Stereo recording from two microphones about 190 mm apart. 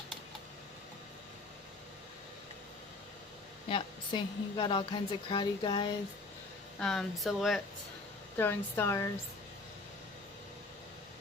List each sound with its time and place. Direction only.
3.7 s a woman's voice: 25° left (ahead or behind)
6.7 s speech: centre (ahead or behind)
8.4 s speech: 15° left (ahead or behind)